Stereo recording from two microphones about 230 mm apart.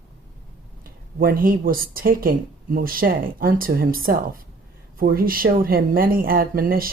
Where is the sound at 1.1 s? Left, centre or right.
Right.